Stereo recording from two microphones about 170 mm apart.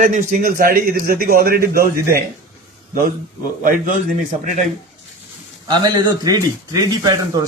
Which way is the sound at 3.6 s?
50° right (ahead or behind).